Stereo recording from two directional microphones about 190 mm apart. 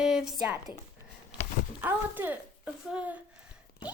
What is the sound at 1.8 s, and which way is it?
Speech, 10° right (ahead or behind).